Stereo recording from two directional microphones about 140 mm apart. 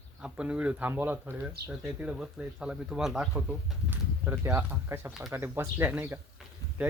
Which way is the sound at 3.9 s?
15° right (ahead or behind).